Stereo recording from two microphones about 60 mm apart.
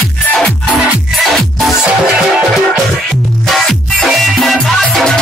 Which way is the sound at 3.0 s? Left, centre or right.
Centre.